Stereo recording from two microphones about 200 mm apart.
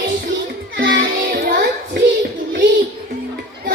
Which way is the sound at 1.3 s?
45° right (ahead or behind).